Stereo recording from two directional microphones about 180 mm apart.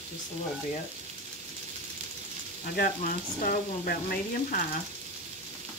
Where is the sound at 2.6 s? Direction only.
55° left (ahead or behind).